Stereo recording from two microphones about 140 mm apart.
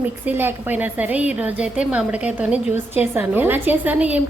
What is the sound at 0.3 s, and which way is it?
A woman's voice, 15° right (ahead or behind).